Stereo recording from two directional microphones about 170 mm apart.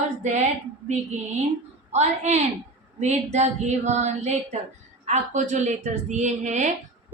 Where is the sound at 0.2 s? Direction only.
45° right (ahead or behind).